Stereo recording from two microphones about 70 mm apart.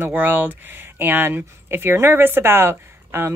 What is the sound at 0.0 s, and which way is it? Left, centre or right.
Speech, right.